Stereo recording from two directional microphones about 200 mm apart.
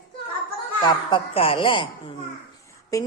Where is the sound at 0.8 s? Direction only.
25° left (ahead or behind).